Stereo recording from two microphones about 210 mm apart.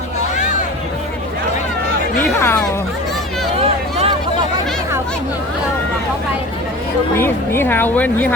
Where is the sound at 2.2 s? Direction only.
10° left (ahead or behind).